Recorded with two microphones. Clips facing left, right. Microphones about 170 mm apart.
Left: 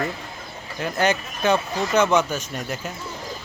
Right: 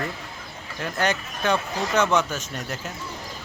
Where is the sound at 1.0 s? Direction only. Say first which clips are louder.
Left 3 dB; centre (ahead or behind).